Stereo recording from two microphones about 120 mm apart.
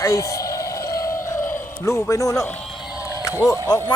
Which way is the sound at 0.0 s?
25° left (ahead or behind).